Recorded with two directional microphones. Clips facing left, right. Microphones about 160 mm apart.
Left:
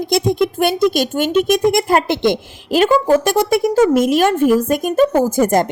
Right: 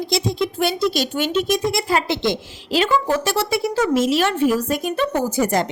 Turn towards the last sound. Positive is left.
turn(degrees=50)  # may be behind; listen again after turning